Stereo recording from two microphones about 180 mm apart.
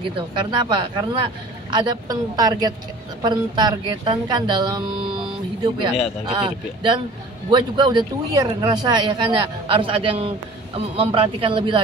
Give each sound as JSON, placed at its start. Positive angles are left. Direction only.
{"t": 0.5, "sound": "a woman's voice", "side_deg": -25}